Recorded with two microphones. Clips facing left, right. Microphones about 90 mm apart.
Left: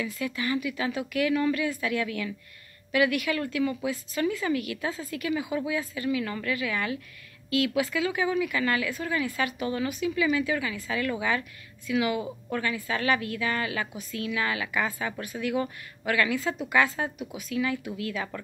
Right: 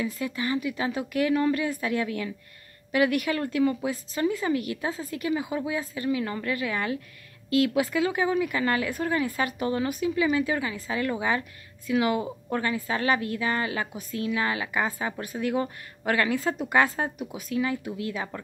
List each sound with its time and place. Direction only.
0.0 s a woman's voice: 30° right (ahead or behind)